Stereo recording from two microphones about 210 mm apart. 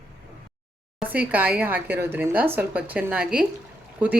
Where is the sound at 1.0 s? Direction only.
10° right (ahead or behind).